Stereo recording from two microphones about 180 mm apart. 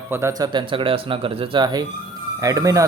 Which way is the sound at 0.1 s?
15° right (ahead or behind).